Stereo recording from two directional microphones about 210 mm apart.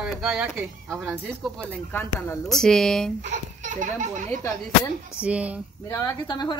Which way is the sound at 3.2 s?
35° right (ahead or behind).